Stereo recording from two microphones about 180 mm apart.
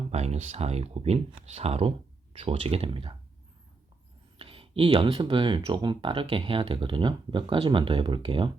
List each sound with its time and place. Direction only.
0.1 s speech: 35° right (ahead or behind)
4.4 s speech: 30° right (ahead or behind)